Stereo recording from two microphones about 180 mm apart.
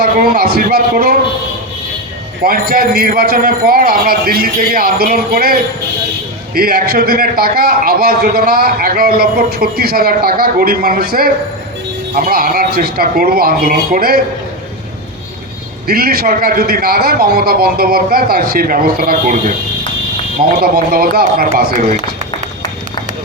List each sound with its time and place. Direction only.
0.0 s a man's voice: 60° right (ahead or behind)
2.4 s a man's voice: 55° right (ahead or behind)
15.9 s a man's voice: 60° right (ahead or behind)
20.6 s a man's voice: 55° right (ahead or behind)